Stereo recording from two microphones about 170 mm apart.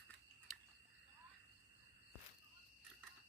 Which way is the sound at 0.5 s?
Centre (ahead or behind).